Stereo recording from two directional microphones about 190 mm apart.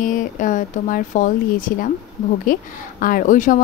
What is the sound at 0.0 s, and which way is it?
A woman's voice, 45° left (ahead or behind).